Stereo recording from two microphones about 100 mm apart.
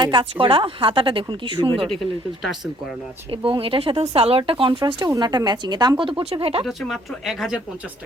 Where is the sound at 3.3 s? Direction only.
60° right (ahead or behind).